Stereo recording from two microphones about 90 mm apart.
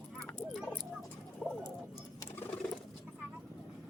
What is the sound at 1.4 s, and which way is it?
Bird, 15° left (ahead or behind).